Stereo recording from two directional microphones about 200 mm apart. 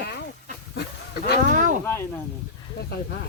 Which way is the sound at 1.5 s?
40° right (ahead or behind).